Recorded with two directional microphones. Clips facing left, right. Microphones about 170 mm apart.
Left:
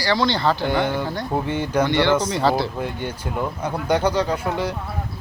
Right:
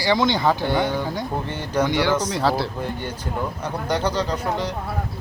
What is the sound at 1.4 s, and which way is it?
Speech, 10° left (ahead or behind).